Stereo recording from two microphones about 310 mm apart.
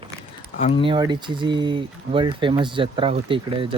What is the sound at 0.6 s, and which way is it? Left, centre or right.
Speech, centre.